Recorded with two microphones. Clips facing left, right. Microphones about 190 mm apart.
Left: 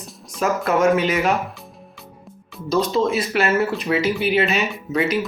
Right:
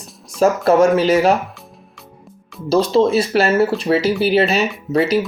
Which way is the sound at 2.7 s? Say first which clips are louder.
Right 5 dB; 30° right (ahead or behind).